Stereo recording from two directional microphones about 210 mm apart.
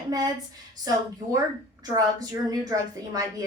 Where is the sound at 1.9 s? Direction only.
15° right (ahead or behind).